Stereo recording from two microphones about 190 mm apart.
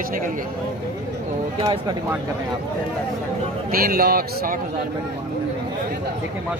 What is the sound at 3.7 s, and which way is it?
Speech, 50° right (ahead or behind).